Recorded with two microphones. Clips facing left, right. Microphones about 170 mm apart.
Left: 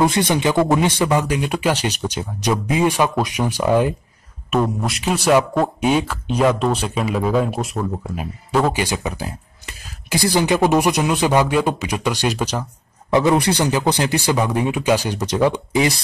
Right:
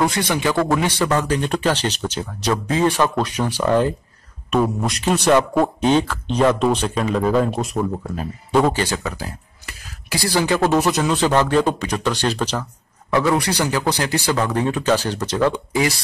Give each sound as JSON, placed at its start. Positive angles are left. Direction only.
{"t": 0.0, "sound": "speech", "side_deg": 20}
{"t": 4.5, "sound": "speech", "side_deg": 0}
{"t": 8.7, "sound": "speech", "side_deg": 15}